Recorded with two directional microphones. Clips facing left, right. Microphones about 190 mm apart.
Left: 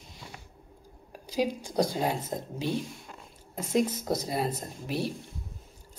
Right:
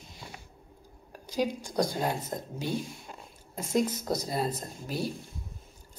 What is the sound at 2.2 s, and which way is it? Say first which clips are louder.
Speech: left 2 dB; 25° left (ahead or behind).